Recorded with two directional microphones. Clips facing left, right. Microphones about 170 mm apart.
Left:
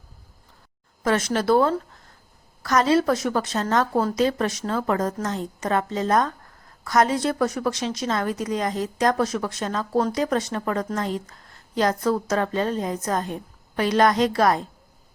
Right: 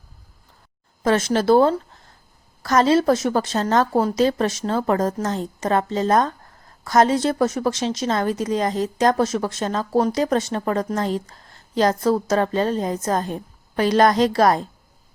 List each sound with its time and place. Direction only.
1.0 s a woman's voice: 30° right (ahead or behind)